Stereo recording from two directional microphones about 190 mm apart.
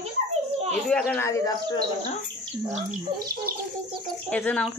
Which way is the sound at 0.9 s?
5° left (ahead or behind).